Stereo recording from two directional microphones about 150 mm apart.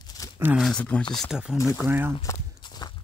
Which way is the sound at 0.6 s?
5° left (ahead or behind).